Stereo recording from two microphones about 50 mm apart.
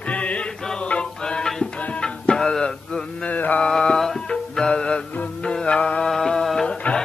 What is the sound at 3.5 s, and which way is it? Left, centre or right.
Mantra, centre.